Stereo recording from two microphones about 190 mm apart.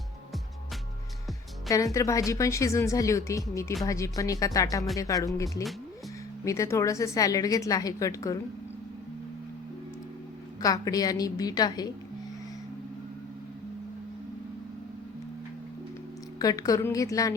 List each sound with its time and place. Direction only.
1.7 s a woman's voice: 15° left (ahead or behind)
10.6 s a woman's voice: 20° left (ahead or behind)
16.4 s a woman's voice: 20° left (ahead or behind)